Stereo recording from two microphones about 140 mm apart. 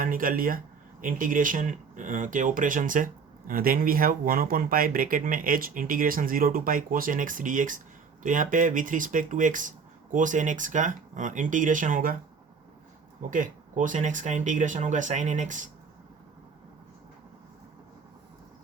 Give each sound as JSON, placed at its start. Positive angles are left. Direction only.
{"t": 0.0, "sound": "speech", "side_deg": -85}
{"t": 1.0, "sound": "speech", "side_deg": -75}
{"t": 13.3, "sound": "speech", "side_deg": -70}